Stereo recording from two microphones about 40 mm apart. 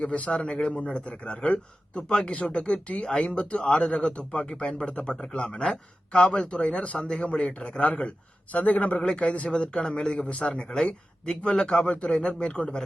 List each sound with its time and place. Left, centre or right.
0.0 s a man's voice: left
8.5 s a man's voice: left